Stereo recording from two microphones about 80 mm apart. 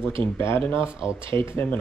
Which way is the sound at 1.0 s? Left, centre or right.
Right.